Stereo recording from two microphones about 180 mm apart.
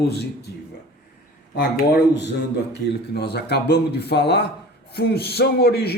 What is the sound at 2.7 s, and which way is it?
A man's voice, 65° left (ahead or behind).